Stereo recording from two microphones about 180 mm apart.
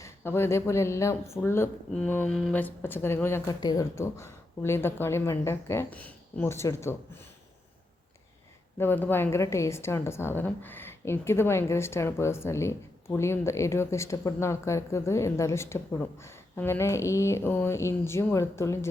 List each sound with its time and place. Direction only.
0.0 s a woman's voice: 15° left (ahead or behind)
8.8 s a woman's voice: 10° left (ahead or behind)